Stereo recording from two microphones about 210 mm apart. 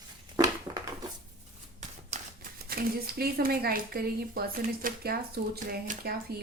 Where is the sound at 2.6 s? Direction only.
45° right (ahead or behind).